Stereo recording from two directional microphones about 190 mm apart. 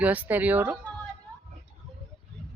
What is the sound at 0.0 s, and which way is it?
Speech, 10° right (ahead or behind).